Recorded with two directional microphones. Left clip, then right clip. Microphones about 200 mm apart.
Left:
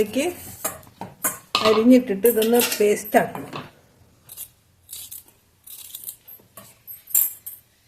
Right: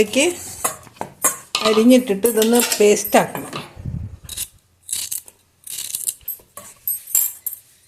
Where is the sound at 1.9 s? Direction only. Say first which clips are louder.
Right 2 dB; 30° right (ahead or behind).